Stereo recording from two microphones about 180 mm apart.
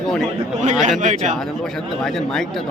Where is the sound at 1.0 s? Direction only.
40° right (ahead or behind).